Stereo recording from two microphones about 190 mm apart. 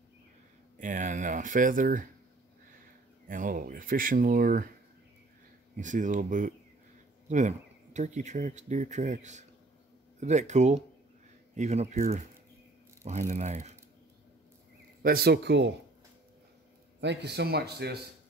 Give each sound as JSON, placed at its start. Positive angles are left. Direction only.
{"t": 0.7, "sound": "speech", "side_deg": -40}
{"t": 3.3, "sound": "speech", "side_deg": -45}
{"t": 5.8, "sound": "speech", "side_deg": -40}
{"t": 15.0, "sound": "speech", "side_deg": -55}
{"t": 17.0, "sound": "speech", "side_deg": -65}